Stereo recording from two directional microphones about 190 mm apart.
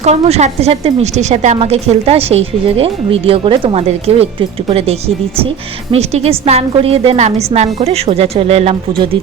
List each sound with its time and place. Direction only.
0.0 s a woman's voice: 35° right (ahead or behind)